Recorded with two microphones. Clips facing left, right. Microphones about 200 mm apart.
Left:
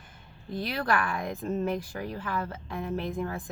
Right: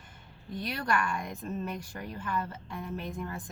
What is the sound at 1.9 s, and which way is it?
Speech, 80° left.